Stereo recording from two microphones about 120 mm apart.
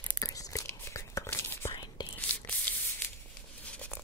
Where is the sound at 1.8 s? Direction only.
40° left (ahead or behind).